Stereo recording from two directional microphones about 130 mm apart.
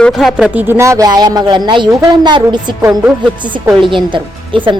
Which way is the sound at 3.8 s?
40° right (ahead or behind).